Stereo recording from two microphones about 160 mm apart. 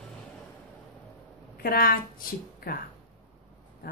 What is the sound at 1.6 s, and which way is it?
A woman's voice, 65° left (ahead or behind).